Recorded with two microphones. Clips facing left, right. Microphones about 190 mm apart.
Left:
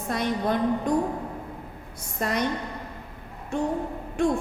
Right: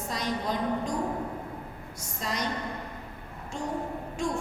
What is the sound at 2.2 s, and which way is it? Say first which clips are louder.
Speech: left 6 dB; 60° left (ahead or behind).